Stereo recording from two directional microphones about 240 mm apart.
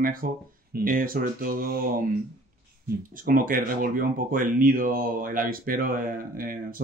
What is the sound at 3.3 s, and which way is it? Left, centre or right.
Speech, right.